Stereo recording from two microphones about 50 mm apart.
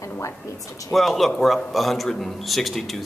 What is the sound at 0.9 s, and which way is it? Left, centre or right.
A man's voice, centre.